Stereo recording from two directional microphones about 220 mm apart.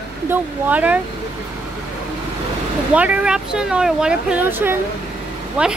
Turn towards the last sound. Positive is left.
turn(degrees=-5)  # may be behind; listen again after turning